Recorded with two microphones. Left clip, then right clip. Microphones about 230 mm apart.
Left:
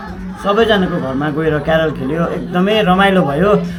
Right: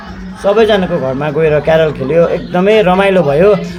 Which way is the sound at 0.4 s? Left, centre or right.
Right.